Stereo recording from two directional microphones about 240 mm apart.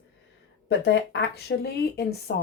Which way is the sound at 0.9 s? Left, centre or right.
Left.